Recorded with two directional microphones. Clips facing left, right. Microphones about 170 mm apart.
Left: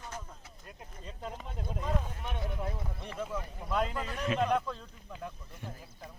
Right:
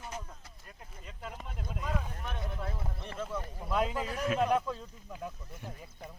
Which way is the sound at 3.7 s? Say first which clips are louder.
Right 1 dB; 5° right (ahead or behind).